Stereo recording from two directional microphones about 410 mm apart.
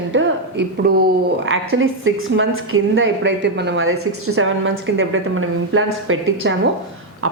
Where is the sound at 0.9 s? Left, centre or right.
Right.